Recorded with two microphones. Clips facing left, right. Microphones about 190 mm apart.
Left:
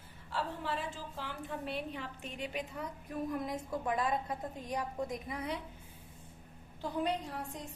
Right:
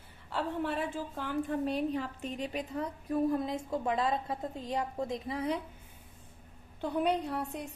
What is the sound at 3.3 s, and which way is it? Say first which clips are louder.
A woman's voice: right 5 dB; 25° right (ahead or behind).